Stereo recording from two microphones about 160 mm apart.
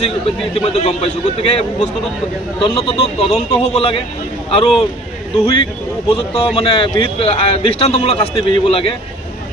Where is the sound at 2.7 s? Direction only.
35° left (ahead or behind).